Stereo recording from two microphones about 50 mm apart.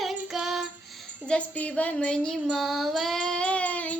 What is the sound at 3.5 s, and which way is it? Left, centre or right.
Child singing, left.